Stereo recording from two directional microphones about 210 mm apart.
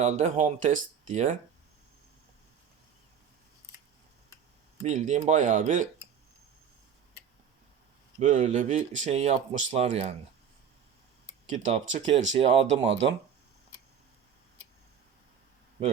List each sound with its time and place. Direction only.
0.0 s speech: 35° right (ahead or behind)
4.8 s speech: 35° right (ahead or behind)
8.2 s speech: 35° right (ahead or behind)
11.4 s speech: 35° right (ahead or behind)